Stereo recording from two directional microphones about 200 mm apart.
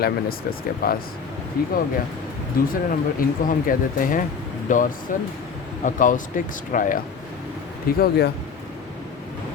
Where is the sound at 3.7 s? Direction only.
45° left (ahead or behind).